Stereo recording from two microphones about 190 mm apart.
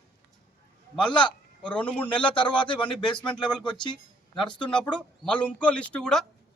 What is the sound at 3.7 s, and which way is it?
Speech, 25° left (ahead or behind).